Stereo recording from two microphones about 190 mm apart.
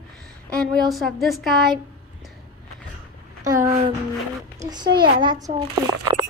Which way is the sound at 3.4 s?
15° right (ahead or behind).